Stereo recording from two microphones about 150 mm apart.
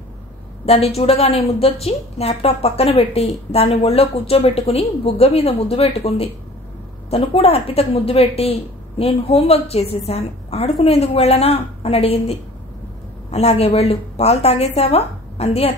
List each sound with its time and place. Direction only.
0.7 s a woman's voice: 40° left (ahead or behind)